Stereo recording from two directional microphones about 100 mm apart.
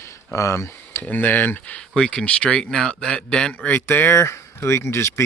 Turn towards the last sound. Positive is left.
turn(degrees=25)  # may be behind; listen again after turning